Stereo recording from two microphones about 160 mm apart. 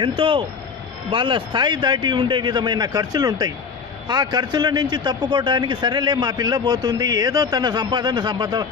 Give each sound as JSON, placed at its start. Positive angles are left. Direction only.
{"t": 0.0, "sound": "a man's voice", "side_deg": -30}